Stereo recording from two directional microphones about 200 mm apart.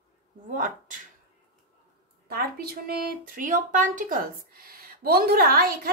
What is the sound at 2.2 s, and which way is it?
A woman's voice, 50° right (ahead or behind).